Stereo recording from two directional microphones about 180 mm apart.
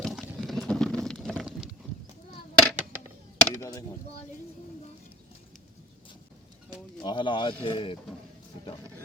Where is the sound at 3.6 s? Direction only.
15° left (ahead or behind).